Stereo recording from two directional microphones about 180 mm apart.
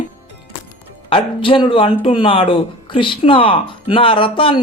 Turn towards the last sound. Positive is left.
turn(degrees=30)  # may be behind; listen again after turning